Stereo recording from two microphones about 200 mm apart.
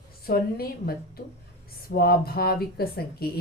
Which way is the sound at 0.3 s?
50° left (ahead or behind).